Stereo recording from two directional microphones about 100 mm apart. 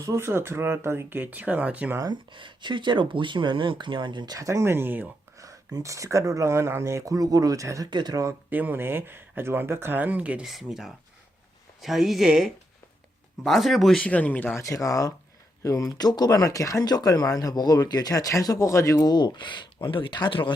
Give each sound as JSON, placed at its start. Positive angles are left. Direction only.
{"t": 0.0, "sound": "speech", "side_deg": -30}
{"t": 2.3, "sound": "speech", "side_deg": -50}
{"t": 4.4, "sound": "speech", "side_deg": -30}
{"t": 5.4, "sound": "speech", "side_deg": -35}
{"t": 7.9, "sound": "speech", "side_deg": -45}
{"t": 8.4, "sound": "speech", "side_deg": -20}
{"t": 10.4, "sound": "a man's voice", "side_deg": -5}
{"t": 14.0, "sound": "speech", "side_deg": 15}
{"t": 14.5, "sound": "speech", "side_deg": 30}
{"t": 19.1, "sound": "speech", "side_deg": 45}